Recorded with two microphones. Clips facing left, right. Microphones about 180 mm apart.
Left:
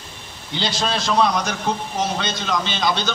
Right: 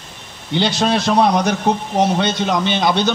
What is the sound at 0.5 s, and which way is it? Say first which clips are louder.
A man's voice: right 7 dB; 60° right (ahead or behind).